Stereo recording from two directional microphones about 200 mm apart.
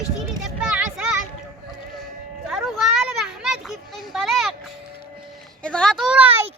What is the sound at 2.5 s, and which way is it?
Children playing, centre (ahead or behind).